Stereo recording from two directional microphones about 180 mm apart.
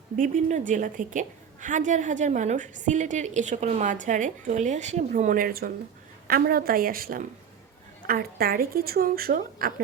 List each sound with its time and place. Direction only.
0.2 s a woman's voice: 45° right (ahead or behind)